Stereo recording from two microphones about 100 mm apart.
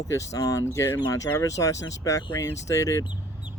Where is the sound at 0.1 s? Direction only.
35° left (ahead or behind).